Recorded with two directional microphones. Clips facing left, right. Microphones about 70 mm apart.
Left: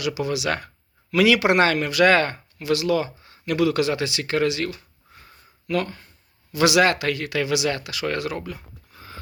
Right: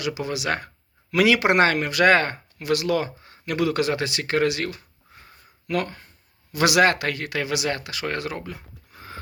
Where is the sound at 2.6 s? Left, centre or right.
Right.